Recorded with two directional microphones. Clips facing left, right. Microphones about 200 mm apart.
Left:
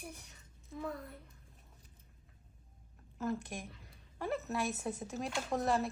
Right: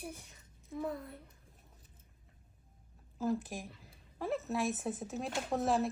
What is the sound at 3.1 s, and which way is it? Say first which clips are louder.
A woman's voice: right 3 dB; centre (ahead or behind).